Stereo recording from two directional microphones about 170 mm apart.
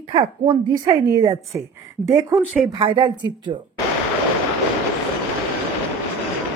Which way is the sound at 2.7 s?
30° right (ahead or behind).